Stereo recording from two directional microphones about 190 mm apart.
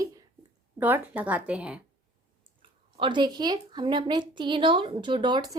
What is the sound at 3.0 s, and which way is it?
A woman's voice, 25° right (ahead or behind).